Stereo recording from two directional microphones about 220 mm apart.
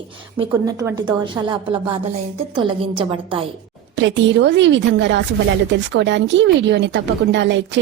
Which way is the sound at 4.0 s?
55° right (ahead or behind).